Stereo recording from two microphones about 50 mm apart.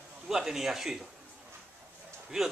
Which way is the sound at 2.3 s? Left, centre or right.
Centre.